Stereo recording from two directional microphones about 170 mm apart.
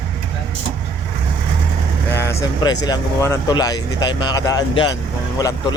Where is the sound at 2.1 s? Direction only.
15° left (ahead or behind).